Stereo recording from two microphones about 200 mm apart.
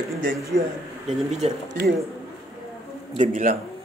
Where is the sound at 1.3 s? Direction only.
35° right (ahead or behind).